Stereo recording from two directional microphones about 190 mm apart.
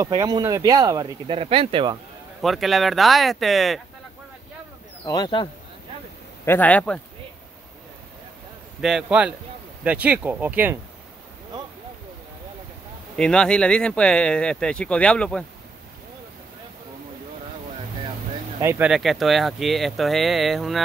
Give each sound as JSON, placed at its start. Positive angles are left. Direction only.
{"t": 0.0, "sound": "speech", "side_deg": -20}
{"t": 2.4, "sound": "speech", "side_deg": 0}
{"t": 5.0, "sound": "speech", "side_deg": 20}
{"t": 6.4, "sound": "speech", "side_deg": 10}
{"t": 8.8, "sound": "speech", "side_deg": -5}
{"t": 13.1, "sound": "speech", "side_deg": 5}
{"t": 18.6, "sound": "speech", "side_deg": -10}